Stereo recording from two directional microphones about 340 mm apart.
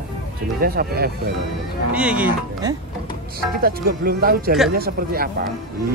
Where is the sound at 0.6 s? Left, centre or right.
Right.